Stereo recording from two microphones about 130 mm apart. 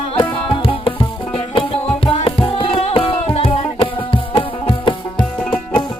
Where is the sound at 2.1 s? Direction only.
45° left (ahead or behind).